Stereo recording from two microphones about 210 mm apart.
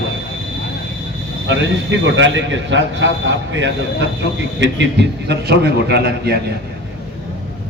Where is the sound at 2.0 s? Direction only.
60° right (ahead or behind).